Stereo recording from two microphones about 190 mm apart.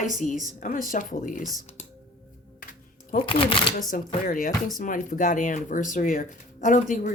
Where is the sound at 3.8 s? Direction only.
45° left (ahead or behind).